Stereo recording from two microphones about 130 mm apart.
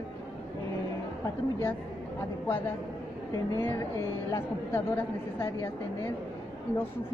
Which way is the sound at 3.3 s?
25° left (ahead or behind).